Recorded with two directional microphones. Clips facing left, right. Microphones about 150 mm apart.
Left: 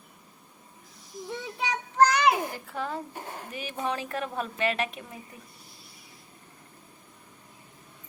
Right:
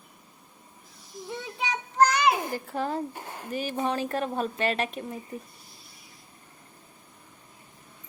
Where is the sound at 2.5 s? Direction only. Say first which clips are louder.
Right 4 dB; 40° right (ahead or behind).